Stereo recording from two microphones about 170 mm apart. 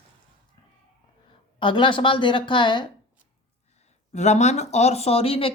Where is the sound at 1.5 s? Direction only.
30° left (ahead or behind).